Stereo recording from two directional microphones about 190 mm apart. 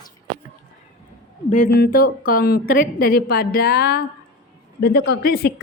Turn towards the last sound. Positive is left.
turn(degrees=55)  # may be behind; listen again after turning